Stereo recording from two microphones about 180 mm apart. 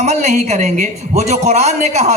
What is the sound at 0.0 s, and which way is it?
A man's voice, 40° right (ahead or behind).